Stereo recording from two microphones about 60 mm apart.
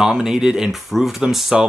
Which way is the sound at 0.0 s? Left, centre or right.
Centre.